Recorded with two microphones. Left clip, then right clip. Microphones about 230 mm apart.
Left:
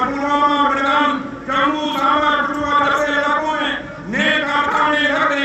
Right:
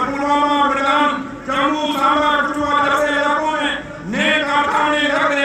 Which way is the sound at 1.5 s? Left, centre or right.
Right.